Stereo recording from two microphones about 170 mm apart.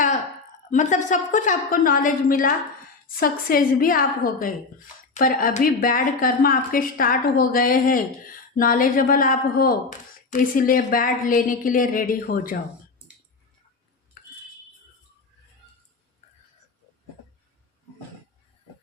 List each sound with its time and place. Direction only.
0.7 s a woman's voice: 45° left (ahead or behind)